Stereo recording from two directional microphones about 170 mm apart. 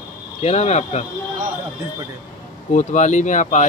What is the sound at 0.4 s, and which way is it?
Speech, 40° left (ahead or behind).